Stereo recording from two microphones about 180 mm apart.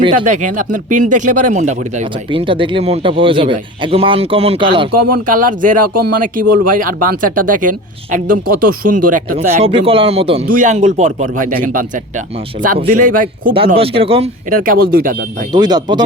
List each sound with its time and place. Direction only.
0.3 s speech: 45° right (ahead or behind)
2.3 s speech: 30° right (ahead or behind)
4.9 s speech: 55° right (ahead or behind)
9.6 s speech: 30° right (ahead or behind)
10.5 s speech: 45° right (ahead or behind)
13.0 s speech: 50° right (ahead or behind)
13.5 s speech: 30° right (ahead or behind)
14.5 s speech: 50° right (ahead or behind)
15.5 s speech: 25° right (ahead or behind)